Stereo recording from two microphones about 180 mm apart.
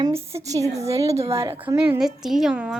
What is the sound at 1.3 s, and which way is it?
Child singing, 15° right (ahead or behind).